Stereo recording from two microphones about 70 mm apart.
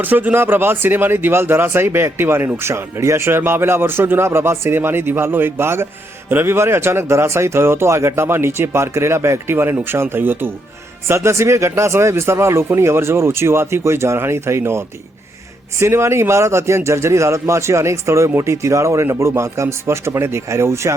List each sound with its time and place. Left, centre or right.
0.0 s speech: right
11.1 s speech: right